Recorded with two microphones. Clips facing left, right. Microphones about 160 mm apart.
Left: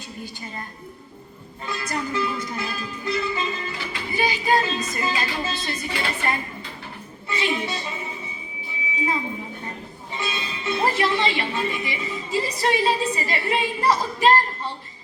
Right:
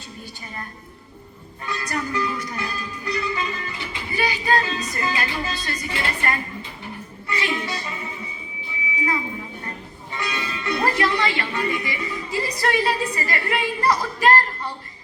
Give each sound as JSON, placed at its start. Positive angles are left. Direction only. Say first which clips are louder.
{"t": 1.6, "sound": "speech", "louder": "right 1 dB", "side_deg": 20}